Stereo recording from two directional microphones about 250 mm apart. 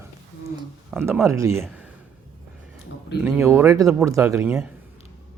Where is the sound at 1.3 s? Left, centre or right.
Centre.